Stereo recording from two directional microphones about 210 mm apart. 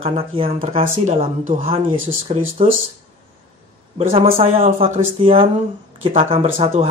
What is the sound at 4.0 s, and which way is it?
Speech, 25° right (ahead or behind).